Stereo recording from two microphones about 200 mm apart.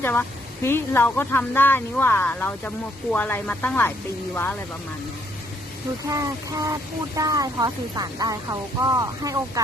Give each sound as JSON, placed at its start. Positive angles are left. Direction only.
{"t": 0.0, "sound": "speech", "side_deg": 10}
{"t": 6.1, "sound": "speech", "side_deg": -15}